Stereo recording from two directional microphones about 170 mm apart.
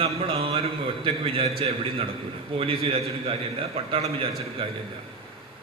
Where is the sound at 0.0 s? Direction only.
35° right (ahead or behind).